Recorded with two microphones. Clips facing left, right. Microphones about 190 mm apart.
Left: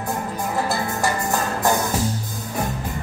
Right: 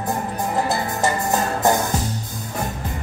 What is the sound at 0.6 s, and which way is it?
Music, 20° right (ahead or behind).